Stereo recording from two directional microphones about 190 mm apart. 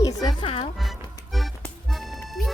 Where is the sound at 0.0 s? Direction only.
20° left (ahead or behind).